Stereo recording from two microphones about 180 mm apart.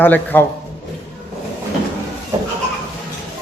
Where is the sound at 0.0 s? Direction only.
10° left (ahead or behind).